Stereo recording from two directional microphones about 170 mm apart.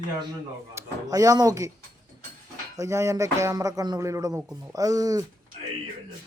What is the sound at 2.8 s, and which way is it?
Speech, 15° right (ahead or behind).